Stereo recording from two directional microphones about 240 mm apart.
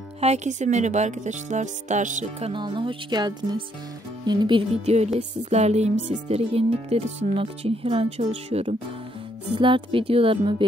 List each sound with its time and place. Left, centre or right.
0.2 s speech: right
2.5 s speech: right